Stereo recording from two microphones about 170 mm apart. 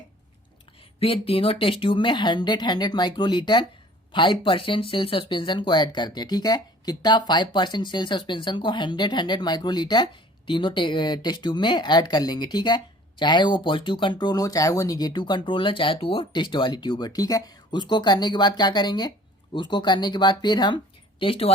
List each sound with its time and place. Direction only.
0.9 s speech: 35° left (ahead or behind)